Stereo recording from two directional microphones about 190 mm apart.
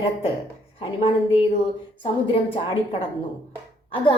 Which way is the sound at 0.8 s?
30° left (ahead or behind).